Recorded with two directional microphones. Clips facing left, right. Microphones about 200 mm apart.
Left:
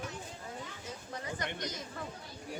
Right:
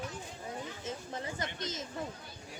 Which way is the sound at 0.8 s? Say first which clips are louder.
Right 1 dB; 25° right (ahead or behind).